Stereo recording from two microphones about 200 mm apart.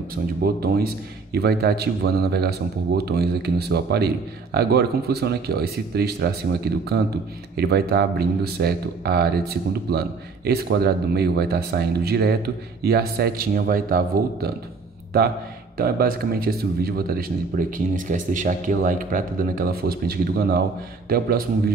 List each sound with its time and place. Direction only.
0.1 s speech: 50° right (ahead or behind)
3.0 s speech: 55° right (ahead or behind)
15.8 s speech: 50° right (ahead or behind)